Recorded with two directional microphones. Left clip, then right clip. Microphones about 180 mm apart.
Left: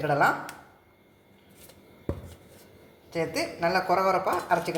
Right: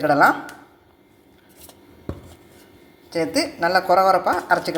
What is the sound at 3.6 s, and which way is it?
Speech, 40° right (ahead or behind).